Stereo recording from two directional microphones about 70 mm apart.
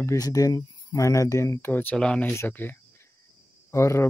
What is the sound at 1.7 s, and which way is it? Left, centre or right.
Speech, left.